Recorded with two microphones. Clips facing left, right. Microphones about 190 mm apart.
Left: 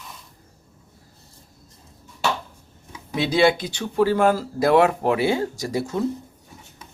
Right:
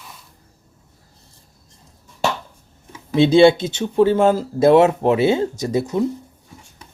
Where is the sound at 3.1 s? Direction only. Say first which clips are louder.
Right 7 dB; 25° right (ahead or behind).